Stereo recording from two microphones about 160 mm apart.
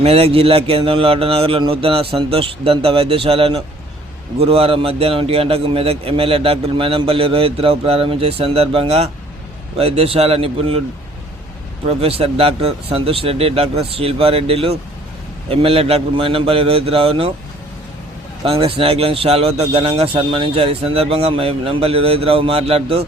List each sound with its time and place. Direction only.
0.0 s a man's voice: 40° right (ahead or behind)
11.9 s a man's voice: 40° right (ahead or behind)
18.4 s a man's voice: 35° right (ahead or behind)